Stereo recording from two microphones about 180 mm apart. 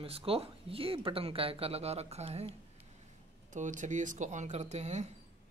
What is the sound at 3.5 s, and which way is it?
Speech, 45° right (ahead or behind).